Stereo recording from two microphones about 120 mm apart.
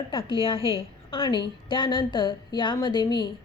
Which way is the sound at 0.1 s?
45° left (ahead or behind).